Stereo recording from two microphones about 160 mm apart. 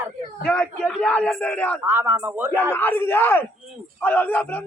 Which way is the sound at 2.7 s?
10° left (ahead or behind).